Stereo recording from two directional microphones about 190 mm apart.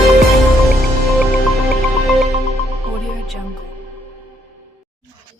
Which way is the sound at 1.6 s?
Centre (ahead or behind).